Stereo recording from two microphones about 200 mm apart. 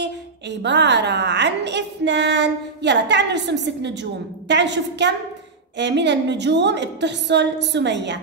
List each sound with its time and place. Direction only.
0.0 s a woman's voice: 60° right (ahead or behind)